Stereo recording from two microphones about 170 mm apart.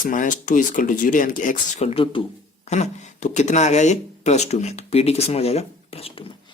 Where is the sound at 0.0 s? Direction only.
50° left (ahead or behind).